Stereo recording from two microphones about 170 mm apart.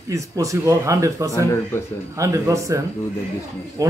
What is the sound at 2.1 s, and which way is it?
Speech, 20° right (ahead or behind).